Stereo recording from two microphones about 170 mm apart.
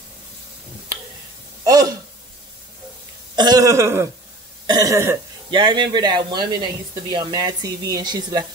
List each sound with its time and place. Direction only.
1.6 s speech: 20° right (ahead or behind)
3.3 s speech: 20° right (ahead or behind)
4.6 s throat clearing: 20° right (ahead or behind)
5.5 s speech: 30° right (ahead or behind)